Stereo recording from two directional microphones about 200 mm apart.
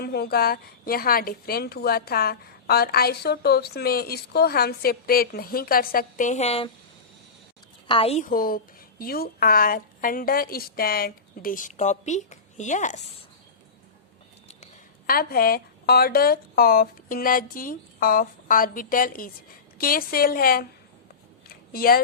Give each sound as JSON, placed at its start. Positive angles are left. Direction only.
{"t": 0.0, "sound": "a woman's voice", "side_deg": 50}
{"t": 7.9, "sound": "a woman's voice", "side_deg": 30}
{"t": 15.0, "sound": "a woman's voice", "side_deg": 50}
{"t": 21.7, "sound": "a woman's voice", "side_deg": 45}